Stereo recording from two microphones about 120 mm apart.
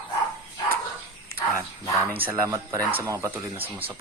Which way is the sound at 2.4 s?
25° right (ahead or behind).